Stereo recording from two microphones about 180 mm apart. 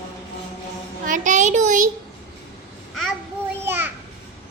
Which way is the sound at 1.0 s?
45° right (ahead or behind).